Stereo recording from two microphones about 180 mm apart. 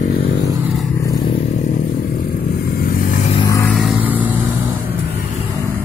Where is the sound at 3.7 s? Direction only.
Centre (ahead or behind).